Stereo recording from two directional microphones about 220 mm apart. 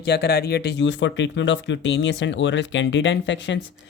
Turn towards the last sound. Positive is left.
turn(degrees=55)  # may be behind; listen again after turning